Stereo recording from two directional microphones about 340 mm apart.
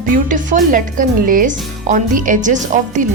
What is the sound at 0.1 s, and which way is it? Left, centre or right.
Speech, right.